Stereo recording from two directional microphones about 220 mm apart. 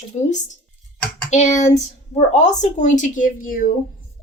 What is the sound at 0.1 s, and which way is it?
A woman's voice, 30° left (ahead or behind).